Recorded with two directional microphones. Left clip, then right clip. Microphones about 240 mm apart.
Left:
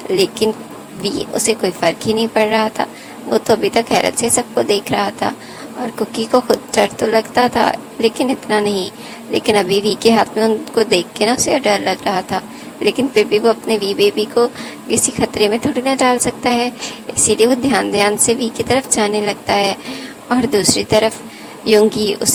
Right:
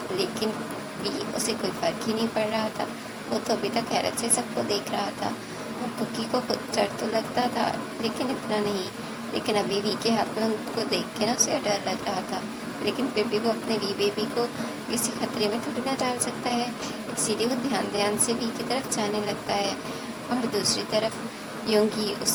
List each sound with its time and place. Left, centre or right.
0.2 s a woman's voice: left